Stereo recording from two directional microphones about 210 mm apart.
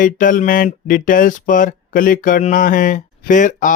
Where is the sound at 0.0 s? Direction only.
40° left (ahead or behind).